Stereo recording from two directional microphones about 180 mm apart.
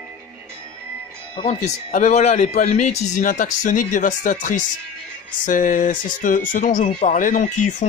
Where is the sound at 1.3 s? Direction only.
40° left (ahead or behind).